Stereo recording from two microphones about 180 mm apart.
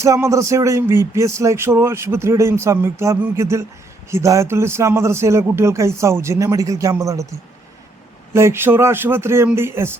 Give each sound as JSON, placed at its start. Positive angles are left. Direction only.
{"t": 0.0, "sound": "speech", "side_deg": -15}